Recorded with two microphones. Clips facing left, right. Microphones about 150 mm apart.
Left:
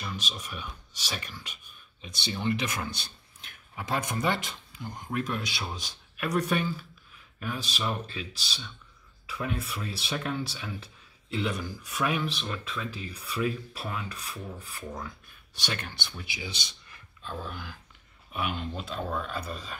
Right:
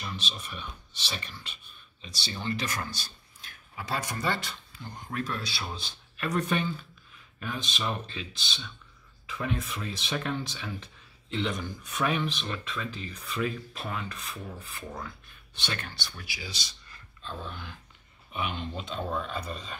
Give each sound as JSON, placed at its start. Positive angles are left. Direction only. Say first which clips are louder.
{"t": 0.0, "sound": "speech", "louder": "left 1 dB", "side_deg": 10}
{"t": 2.0, "sound": "speech", "louder": "left 4 dB", "side_deg": 55}
{"t": 2.3, "sound": "speech", "louder": "left 3 dB", "side_deg": 15}
{"t": 15.7, "sound": "speech", "louder": "left 1 dB", "side_deg": 20}
{"t": 17.2, "sound": "speech", "louder": "left 2 dB", "side_deg": 5}